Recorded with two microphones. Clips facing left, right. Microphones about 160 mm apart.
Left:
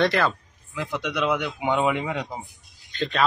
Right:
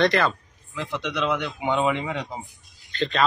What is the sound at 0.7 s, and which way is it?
Speech, 10° left (ahead or behind).